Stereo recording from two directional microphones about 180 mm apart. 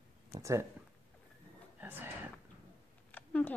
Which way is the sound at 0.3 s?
15° right (ahead or behind).